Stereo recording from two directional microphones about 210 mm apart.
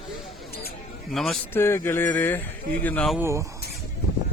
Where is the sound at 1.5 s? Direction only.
10° left (ahead or behind).